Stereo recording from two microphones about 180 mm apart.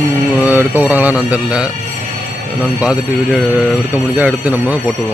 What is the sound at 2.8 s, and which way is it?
Speech, 5° right (ahead or behind).